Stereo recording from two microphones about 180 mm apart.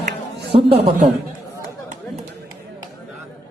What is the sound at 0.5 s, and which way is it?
Speech, 30° right (ahead or behind).